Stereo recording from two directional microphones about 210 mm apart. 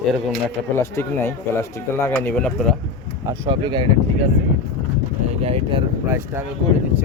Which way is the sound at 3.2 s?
20° right (ahead or behind).